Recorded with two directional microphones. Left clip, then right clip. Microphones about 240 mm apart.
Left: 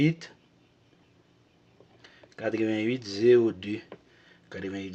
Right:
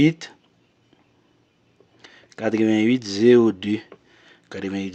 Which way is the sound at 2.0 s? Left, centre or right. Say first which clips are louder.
Right 7 dB; right.